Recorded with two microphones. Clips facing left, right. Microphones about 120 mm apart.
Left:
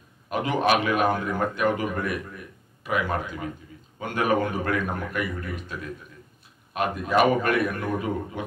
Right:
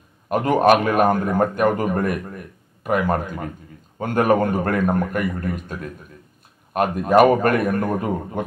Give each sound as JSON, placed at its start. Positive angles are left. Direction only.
{"t": 0.3, "sound": "a man's voice", "side_deg": -45}